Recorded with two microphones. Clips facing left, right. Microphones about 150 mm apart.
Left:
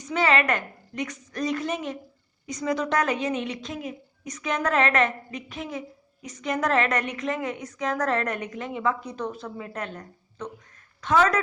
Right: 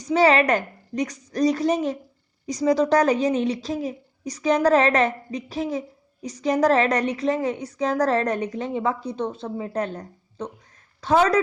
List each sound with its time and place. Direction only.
0.0 s a woman's voice: 35° right (ahead or behind)